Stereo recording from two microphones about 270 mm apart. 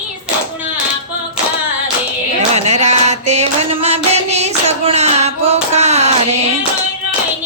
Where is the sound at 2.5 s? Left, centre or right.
Right.